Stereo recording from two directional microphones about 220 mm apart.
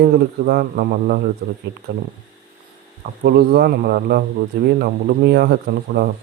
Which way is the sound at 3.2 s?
45° right (ahead or behind).